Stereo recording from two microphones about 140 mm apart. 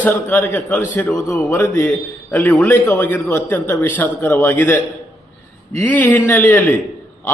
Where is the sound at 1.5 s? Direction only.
20° left (ahead or behind).